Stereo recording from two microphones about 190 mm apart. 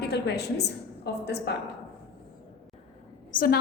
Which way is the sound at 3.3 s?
50° left (ahead or behind).